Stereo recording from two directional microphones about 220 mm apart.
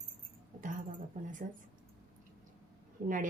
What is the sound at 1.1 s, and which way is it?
Speech, 35° right (ahead or behind).